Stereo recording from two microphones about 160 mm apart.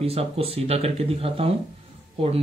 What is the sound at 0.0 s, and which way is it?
Speech, 40° right (ahead or behind).